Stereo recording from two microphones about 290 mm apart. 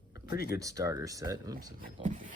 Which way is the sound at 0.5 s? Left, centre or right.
Centre.